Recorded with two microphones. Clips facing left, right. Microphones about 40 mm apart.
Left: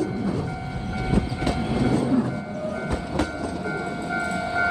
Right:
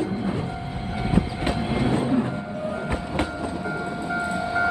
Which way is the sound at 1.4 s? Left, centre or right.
Right.